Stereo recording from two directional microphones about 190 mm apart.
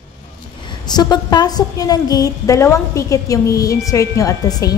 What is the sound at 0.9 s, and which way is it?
A woman's voice, 20° left (ahead or behind).